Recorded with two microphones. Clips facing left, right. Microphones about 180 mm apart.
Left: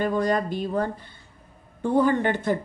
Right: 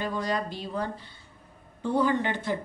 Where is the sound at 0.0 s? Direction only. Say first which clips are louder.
Left 6 dB; 50° left (ahead or behind).